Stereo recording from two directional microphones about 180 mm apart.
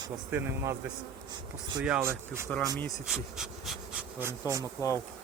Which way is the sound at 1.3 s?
25° right (ahead or behind).